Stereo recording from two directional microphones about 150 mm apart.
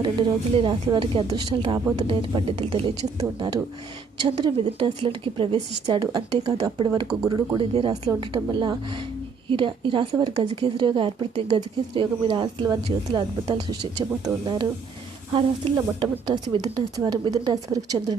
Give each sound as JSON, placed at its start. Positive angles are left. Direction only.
{"t": 0.0, "sound": "speech", "side_deg": -35}
{"t": 3.2, "sound": "a woman's voice", "side_deg": -25}
{"t": 6.0, "sound": "a woman's voice", "side_deg": -25}
{"t": 7.3, "sound": "a woman's voice", "side_deg": -25}
{"t": 7.7, "sound": "speech", "side_deg": -40}
{"t": 11.5, "sound": "a woman's voice", "side_deg": -30}